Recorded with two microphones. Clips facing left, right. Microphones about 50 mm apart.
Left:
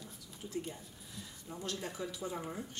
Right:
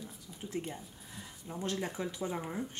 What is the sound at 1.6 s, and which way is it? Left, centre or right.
Speech, right.